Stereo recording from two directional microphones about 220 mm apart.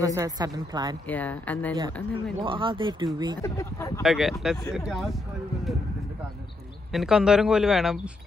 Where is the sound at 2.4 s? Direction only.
20° right (ahead or behind).